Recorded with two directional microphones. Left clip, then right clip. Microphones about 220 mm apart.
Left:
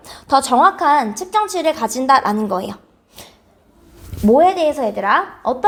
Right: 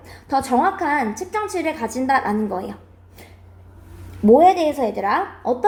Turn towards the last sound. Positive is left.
turn(degrees=20)  # may be behind; listen again after turning